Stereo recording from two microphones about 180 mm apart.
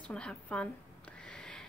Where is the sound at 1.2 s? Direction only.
5° left (ahead or behind).